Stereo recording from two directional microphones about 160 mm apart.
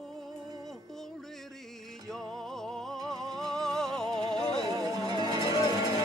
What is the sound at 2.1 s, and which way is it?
Music, 5° left (ahead or behind).